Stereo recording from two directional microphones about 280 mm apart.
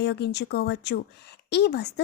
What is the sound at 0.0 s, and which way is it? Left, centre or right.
A woman's voice, left.